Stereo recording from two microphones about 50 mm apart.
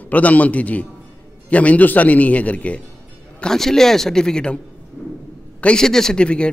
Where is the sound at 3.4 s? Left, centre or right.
Centre.